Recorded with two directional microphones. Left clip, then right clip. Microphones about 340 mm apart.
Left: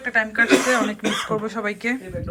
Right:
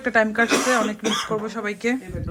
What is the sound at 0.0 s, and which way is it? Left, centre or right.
Speech, centre.